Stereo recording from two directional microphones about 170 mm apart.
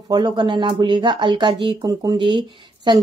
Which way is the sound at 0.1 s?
25° right (ahead or behind).